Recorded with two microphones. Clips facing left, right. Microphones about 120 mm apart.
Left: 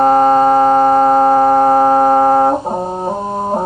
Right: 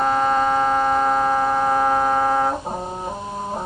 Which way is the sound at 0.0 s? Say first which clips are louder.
Left 9 dB; 45° left (ahead or behind).